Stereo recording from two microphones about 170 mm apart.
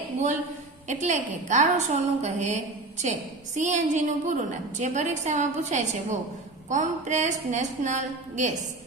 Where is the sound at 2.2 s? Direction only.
40° right (ahead or behind).